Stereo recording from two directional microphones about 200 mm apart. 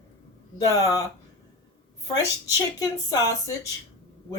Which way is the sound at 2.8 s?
20° left (ahead or behind).